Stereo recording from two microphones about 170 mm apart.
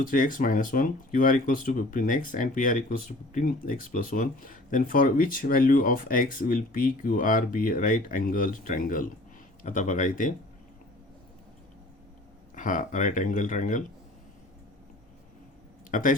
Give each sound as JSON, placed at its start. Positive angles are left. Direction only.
{"t": 0.0, "sound": "speech", "side_deg": 55}
{"t": 12.5, "sound": "speech", "side_deg": 50}
{"t": 15.9, "sound": "speech", "side_deg": 50}